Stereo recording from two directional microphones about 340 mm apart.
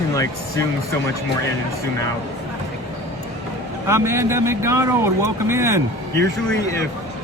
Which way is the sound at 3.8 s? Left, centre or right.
Centre.